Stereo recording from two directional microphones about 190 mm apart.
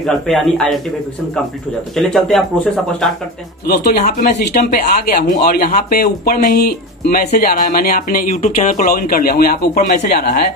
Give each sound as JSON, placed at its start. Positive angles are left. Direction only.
{"t": 0.0, "sound": "speech", "side_deg": 0}
{"t": 2.0, "sound": "speech", "side_deg": 0}
{"t": 3.6, "sound": "speech", "side_deg": 55}
{"t": 4.0, "sound": "speech", "side_deg": 40}